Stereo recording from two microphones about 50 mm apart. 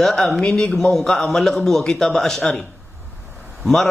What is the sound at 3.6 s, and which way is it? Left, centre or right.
Speech, centre.